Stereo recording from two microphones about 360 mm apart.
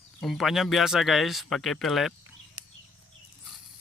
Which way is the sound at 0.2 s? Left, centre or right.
Centre.